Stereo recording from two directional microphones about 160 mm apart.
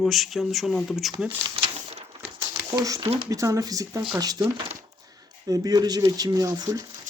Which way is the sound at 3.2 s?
20° right (ahead or behind).